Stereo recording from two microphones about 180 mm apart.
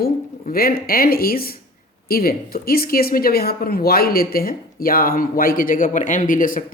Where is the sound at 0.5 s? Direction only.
55° left (ahead or behind).